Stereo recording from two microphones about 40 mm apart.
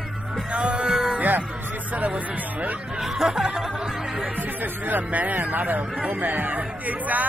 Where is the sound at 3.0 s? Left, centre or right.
Centre.